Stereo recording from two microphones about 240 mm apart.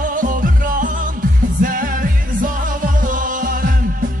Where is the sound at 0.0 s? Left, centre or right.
Right.